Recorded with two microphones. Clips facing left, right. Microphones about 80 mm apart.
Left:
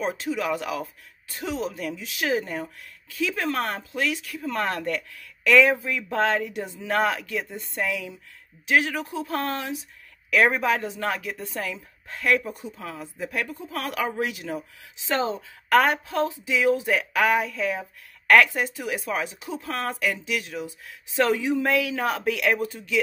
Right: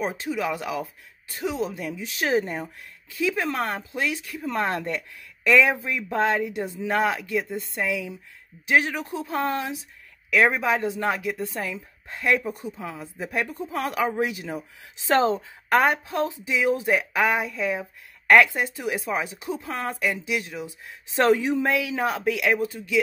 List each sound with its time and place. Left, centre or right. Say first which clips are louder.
0.0 s speech: even; centre
2.1 s speech: right 3 dB; right
3.2 s speech: right 1 dB; centre
10.3 s a woman's voice: even; centre
10.8 s speech: right 3 dB; centre
13.3 s speech: right 4 dB; right
15.0 s a woman's voice: right 5 dB; right
15.7 s speech: left 1 dB; right
21.2 s speech: right 2 dB; right
21.6 s speech: even; centre